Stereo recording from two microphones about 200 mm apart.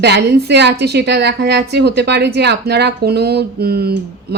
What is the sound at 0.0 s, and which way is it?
A woman's voice, 55° right (ahead or behind).